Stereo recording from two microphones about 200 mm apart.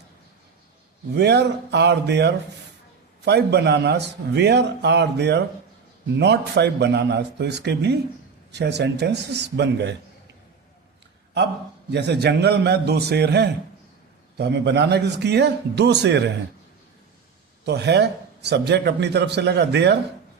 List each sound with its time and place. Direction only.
1.1 s a man's voice: 55° right (ahead or behind)
11.9 s a man's voice: 60° right (ahead or behind)
17.7 s a man's voice: 55° right (ahead or behind)